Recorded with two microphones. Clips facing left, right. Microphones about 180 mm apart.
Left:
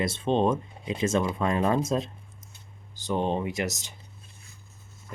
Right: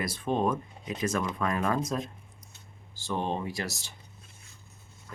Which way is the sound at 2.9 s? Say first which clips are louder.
Left 4 dB; 20° left (ahead or behind).